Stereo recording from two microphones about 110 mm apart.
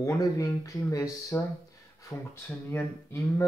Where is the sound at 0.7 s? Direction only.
30° left (ahead or behind).